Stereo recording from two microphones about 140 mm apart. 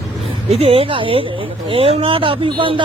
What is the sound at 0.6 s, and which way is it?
Speech, 45° right (ahead or behind).